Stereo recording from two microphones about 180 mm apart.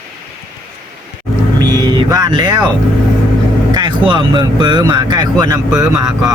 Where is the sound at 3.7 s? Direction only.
25° right (ahead or behind).